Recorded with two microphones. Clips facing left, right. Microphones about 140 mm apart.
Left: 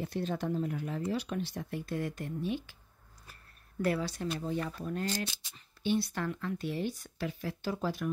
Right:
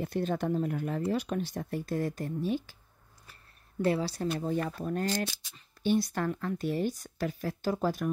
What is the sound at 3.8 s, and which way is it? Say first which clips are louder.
Speech: right 3 dB; 30° right (ahead or behind).